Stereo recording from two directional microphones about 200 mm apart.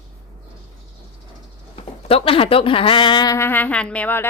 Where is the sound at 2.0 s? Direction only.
25° left (ahead or behind).